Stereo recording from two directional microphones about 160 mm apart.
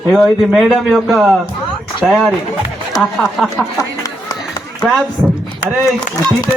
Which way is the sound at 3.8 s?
25° left (ahead or behind).